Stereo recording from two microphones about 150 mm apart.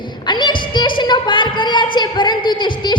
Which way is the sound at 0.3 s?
30° left (ahead or behind).